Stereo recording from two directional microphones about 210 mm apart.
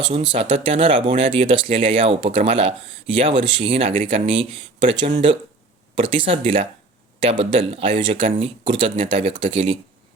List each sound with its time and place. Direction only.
0.0 s speech: 25° right (ahead or behind)